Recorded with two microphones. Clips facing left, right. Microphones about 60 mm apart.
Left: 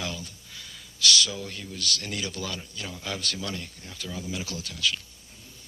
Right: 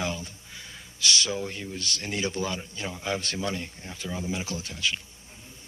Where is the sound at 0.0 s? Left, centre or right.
Right.